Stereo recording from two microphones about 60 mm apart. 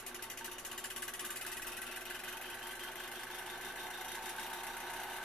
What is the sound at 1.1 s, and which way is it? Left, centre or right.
Engine, centre.